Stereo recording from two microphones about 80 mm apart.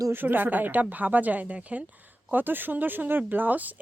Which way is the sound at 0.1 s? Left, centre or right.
Right.